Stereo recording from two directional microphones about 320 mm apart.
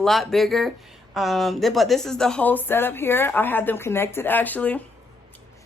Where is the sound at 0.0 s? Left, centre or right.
Centre.